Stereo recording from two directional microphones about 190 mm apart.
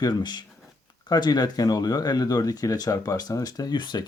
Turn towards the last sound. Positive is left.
turn(degrees=25)  # may be behind; listen again after turning